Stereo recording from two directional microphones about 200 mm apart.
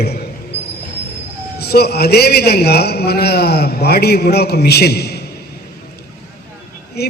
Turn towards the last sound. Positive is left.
turn(degrees=55)  # may be behind; listen again after turning